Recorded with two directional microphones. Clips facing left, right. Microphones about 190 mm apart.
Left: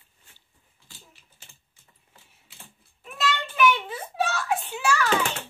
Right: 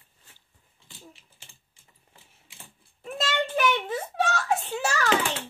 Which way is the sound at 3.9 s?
45° right (ahead or behind).